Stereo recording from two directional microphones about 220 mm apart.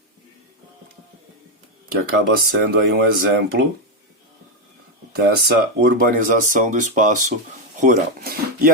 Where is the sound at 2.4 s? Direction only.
45° right (ahead or behind).